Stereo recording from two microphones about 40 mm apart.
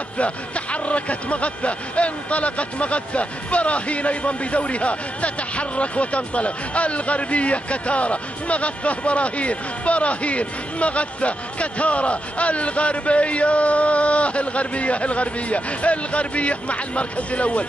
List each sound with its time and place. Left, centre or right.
0.2 s speech: left